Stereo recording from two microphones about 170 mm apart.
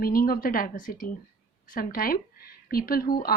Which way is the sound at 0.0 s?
60° left (ahead or behind).